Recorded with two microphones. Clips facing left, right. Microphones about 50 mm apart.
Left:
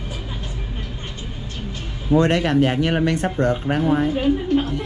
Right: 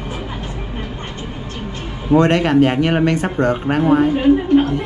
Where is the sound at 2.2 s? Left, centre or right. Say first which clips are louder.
Right 4 dB; right.